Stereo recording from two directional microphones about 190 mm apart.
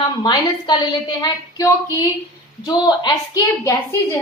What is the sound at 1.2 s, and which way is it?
A woman's voice, 20° left (ahead or behind).